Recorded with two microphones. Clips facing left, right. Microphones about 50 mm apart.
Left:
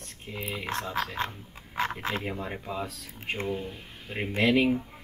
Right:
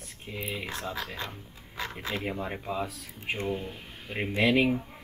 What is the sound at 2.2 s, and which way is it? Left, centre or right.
Speech, centre.